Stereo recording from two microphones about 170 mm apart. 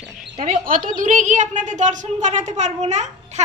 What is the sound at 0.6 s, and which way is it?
A woman's voice, 55° right (ahead or behind).